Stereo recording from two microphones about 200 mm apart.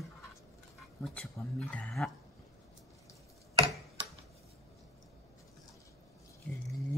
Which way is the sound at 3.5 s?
30° right (ahead or behind).